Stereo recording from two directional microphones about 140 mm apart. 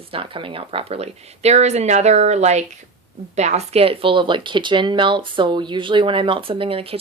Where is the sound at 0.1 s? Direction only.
40° right (ahead or behind).